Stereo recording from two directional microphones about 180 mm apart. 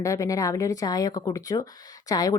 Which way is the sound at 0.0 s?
15° left (ahead or behind).